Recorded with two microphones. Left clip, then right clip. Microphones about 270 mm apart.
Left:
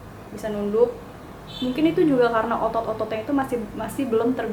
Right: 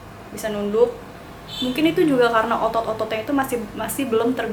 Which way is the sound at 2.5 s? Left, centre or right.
Left.